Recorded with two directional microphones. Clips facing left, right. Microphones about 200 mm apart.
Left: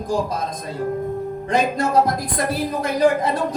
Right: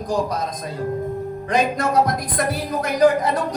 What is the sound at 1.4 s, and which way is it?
Speech, 25° left (ahead or behind).